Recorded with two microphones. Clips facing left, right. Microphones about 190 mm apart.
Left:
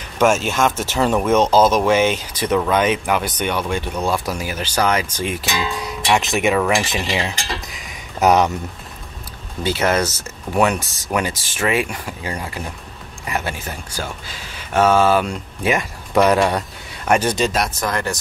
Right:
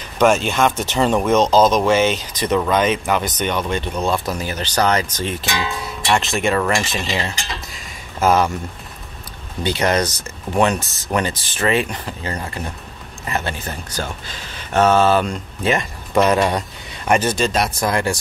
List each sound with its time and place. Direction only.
0.2 s speech: 5° left (ahead or behind)
6.8 s speech: 20° left (ahead or behind)
8.2 s speech: 20° left (ahead or behind)
9.6 s speech: 5° left (ahead or behind)
17.7 s speech: 10° right (ahead or behind)